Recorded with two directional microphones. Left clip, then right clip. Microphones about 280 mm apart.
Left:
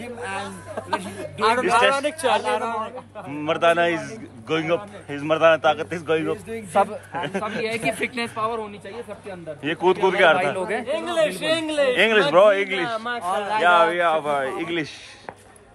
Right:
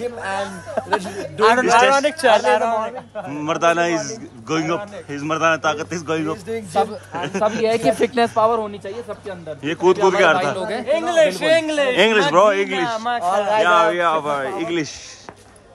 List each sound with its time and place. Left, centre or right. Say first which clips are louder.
0.7 s speech: right 6 dB; right
3.3 s a man's voice: right 1 dB; centre
7.6 s speech: right 7 dB; right
7.9 s a man's voice: right 9 dB; centre
9.7 s a man's voice: right 4 dB; centre
10.7 s a man's voice: right 5 dB; right
12.0 s a man's voice: right 2 dB; centre
12.8 s speech: right 5 dB; right
13.7 s a man's voice: left 2 dB; centre